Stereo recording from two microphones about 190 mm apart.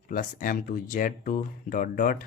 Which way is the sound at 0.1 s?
45° left (ahead or behind).